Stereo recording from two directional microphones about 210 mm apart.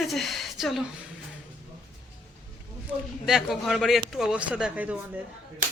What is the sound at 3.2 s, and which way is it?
Speech, centre (ahead or behind).